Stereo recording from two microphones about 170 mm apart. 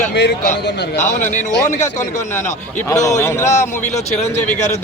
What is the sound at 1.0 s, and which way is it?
Speech, 45° left (ahead or behind).